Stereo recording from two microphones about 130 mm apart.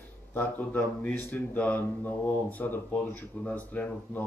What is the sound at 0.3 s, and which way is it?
Speech, 15° left (ahead or behind).